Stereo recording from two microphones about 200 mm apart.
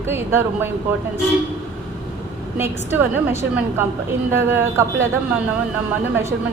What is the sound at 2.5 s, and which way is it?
A woman's voice, 10° right (ahead or behind).